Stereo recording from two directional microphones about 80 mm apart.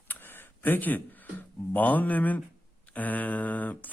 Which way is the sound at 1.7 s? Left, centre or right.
Left.